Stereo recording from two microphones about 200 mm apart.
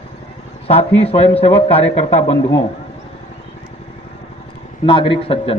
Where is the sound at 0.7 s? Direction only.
30° left (ahead or behind).